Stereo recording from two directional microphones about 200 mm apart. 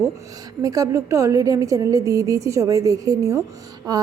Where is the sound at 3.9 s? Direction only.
20° right (ahead or behind).